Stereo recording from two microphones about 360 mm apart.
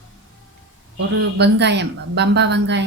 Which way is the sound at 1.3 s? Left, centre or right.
Right.